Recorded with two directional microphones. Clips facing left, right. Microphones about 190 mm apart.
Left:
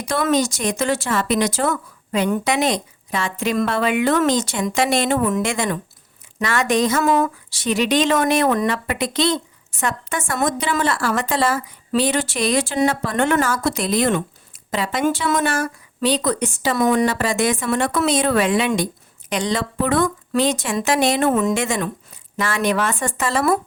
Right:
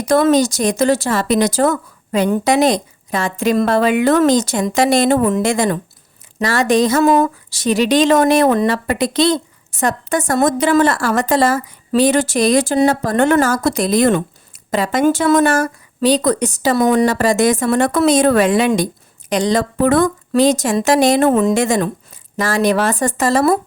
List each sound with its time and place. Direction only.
0.0 s speech: 40° right (ahead or behind)